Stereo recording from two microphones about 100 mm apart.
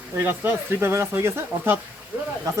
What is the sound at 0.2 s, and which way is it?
Speech, 25° right (ahead or behind).